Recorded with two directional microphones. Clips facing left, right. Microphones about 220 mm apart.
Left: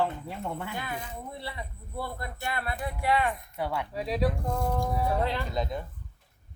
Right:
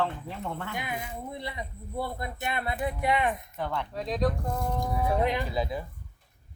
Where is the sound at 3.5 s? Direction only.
10° left (ahead or behind).